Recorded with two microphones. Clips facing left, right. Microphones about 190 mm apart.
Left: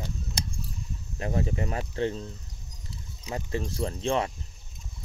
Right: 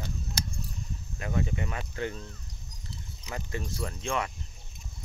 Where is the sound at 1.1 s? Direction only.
30° left (ahead or behind).